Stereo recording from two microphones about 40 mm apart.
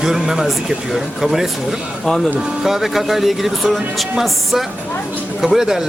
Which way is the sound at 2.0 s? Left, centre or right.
Centre.